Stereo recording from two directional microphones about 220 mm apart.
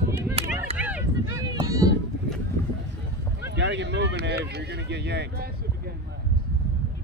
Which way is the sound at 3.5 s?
55° right (ahead or behind).